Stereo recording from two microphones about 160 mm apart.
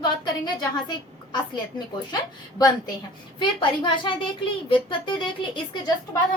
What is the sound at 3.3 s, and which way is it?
A woman's voice, 30° left (ahead or behind).